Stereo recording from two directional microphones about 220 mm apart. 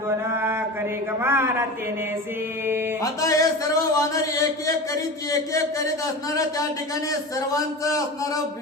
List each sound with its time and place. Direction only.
0.3 s mantra: 10° right (ahead or behind)
1.2 s a man's voice: 10° right (ahead or behind)
3.0 s speech: 15° left (ahead or behind)
7.3 s speech: 15° left (ahead or behind)